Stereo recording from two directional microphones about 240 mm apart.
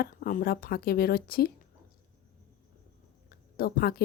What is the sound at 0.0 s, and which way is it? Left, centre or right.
A woman's voice, left.